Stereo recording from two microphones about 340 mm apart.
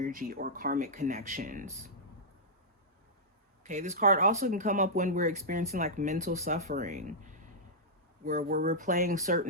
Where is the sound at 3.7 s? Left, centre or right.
Right.